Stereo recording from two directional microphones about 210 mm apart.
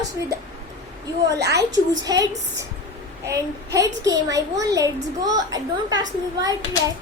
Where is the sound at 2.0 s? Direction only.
15° right (ahead or behind).